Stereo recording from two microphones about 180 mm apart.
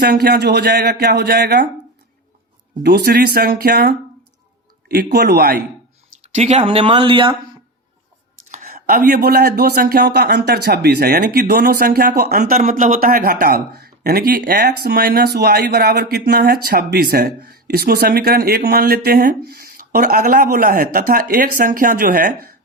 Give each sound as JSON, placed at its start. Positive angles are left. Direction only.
{"t": 0.0, "sound": "speech", "side_deg": -60}
{"t": 2.8, "sound": "speech", "side_deg": -65}
{"t": 6.3, "sound": "speech", "side_deg": -35}
{"t": 8.4, "sound": "speech", "side_deg": -45}